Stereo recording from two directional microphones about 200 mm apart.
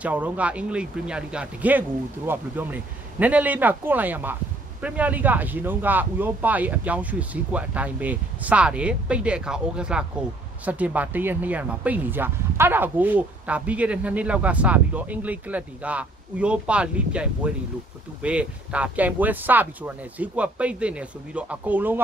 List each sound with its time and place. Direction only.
0.0 s speech: 5° right (ahead or behind)